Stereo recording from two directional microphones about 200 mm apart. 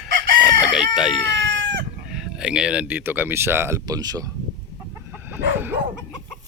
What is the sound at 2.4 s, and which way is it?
Speech, 5° right (ahead or behind).